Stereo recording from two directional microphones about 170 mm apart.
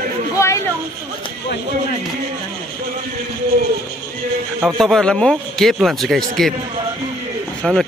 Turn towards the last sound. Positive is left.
turn(degrees=0)  # may be behind; listen again after turning